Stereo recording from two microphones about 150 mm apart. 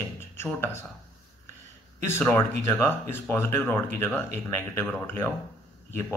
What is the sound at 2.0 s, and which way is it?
A man's voice, 15° left (ahead or behind).